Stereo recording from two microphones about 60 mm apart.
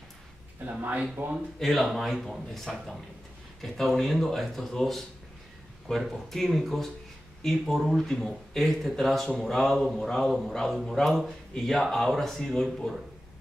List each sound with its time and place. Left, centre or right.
0.7 s speech: right
1.6 s speech: centre